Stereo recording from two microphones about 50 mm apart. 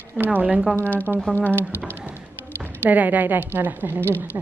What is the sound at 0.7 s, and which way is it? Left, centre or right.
Speech, left.